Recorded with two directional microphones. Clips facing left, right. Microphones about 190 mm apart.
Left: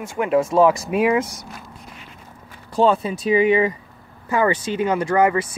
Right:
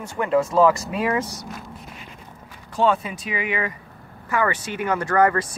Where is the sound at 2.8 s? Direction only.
35° left (ahead or behind).